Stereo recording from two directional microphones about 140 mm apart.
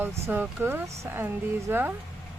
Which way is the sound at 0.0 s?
15° right (ahead or behind).